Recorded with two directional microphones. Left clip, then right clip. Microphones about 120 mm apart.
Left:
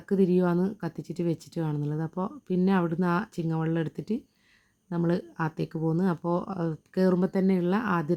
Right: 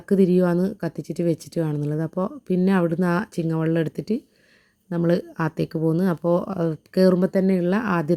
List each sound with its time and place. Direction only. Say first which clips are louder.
0.0 s speech: right 6 dB; 35° right (ahead or behind)
7.3 s speech: right 6 dB; 25° right (ahead or behind)